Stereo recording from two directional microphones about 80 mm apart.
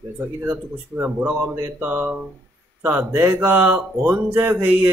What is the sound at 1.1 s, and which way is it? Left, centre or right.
A man's voice, centre.